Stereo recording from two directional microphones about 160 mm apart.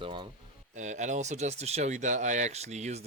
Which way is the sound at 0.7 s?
50° right (ahead or behind).